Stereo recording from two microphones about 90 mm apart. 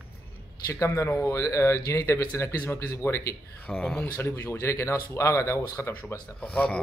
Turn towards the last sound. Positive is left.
turn(degrees=15)  # may be behind; listen again after turning